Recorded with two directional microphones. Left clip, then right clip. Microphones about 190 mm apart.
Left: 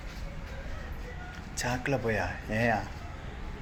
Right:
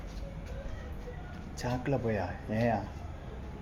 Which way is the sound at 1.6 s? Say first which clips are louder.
Left 3 dB; 10° right (ahead or behind).